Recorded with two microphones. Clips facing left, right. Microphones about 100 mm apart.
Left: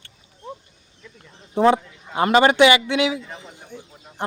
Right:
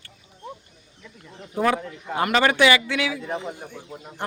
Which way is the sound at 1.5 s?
25° left (ahead or behind).